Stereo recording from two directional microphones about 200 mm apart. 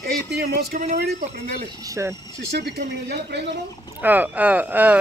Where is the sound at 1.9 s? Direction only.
15° right (ahead or behind).